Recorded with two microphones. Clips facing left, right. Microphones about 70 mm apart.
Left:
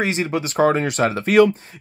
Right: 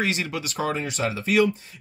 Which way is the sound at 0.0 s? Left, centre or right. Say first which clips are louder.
Left 5 dB; left.